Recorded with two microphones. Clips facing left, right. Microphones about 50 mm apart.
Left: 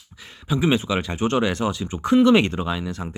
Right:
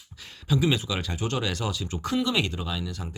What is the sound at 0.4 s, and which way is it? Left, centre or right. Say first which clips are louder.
Speech: left 4 dB; left.